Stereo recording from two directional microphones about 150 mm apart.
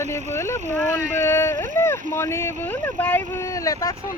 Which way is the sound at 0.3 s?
20° left (ahead or behind).